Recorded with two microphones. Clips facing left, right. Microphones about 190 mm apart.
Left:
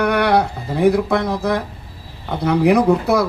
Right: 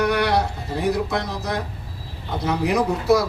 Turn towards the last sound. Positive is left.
turn(degrees=60)  # may be behind; listen again after turning